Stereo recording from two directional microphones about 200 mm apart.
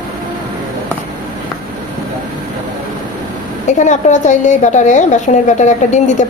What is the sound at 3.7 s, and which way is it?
A woman's voice, 35° left (ahead or behind).